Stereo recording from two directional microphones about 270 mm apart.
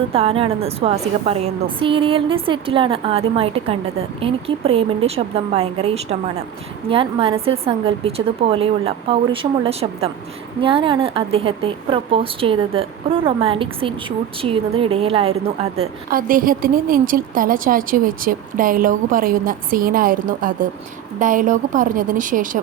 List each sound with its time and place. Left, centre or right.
0.1 s a woman's voice: right